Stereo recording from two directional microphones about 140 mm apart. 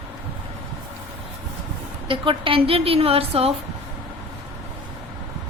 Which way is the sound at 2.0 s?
40° right (ahead or behind).